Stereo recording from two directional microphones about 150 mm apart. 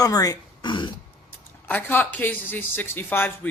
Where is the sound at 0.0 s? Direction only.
25° left (ahead or behind).